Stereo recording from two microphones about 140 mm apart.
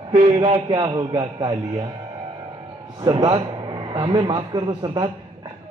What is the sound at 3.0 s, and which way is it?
A man's voice, 30° right (ahead or behind).